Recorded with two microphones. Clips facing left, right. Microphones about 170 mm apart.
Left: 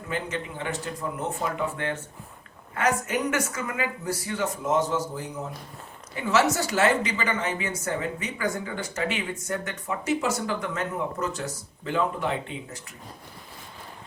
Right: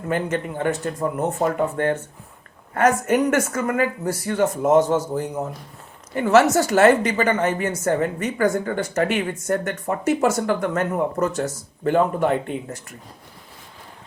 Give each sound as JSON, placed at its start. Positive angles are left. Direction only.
{"t": 0.1, "sound": "a woman's voice", "side_deg": -50}